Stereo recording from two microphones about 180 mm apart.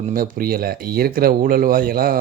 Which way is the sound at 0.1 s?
55° right (ahead or behind).